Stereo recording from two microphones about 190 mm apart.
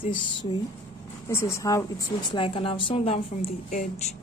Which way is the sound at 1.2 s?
15° left (ahead or behind).